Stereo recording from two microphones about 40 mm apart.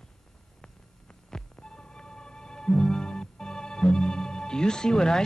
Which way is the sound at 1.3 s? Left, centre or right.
Centre.